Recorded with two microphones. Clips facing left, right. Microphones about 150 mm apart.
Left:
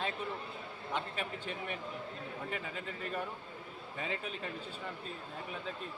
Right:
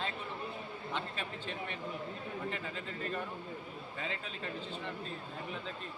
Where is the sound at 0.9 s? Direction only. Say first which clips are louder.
Left 3 dB; 10° left (ahead or behind).